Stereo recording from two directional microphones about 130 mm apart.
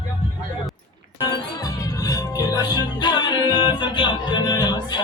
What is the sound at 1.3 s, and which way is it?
Music, 30° left (ahead or behind).